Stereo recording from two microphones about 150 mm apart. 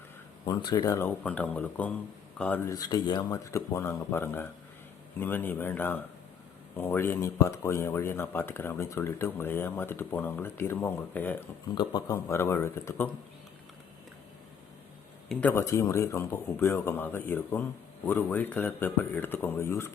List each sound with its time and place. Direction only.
0.4 s speech: 30° left (ahead or behind)
1.2 s speech: 10° left (ahead or behind)
2.7 s speech: 30° left (ahead or behind); by 11.4 s 10° left (ahead or behind)
11.7 s speech: 30° left (ahead or behind)
15.3 s speech: 10° left (ahead or behind)